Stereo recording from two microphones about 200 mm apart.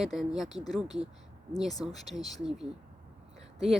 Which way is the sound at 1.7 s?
20° left (ahead or behind).